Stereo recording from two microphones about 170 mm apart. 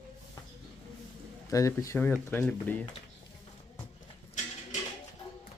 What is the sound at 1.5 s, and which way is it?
Speech, 20° left (ahead or behind).